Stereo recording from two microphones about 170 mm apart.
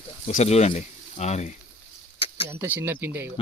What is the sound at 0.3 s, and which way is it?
Speech, 40° left (ahead or behind).